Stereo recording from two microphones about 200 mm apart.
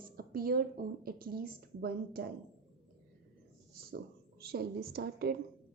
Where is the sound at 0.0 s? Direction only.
45° right (ahead or behind).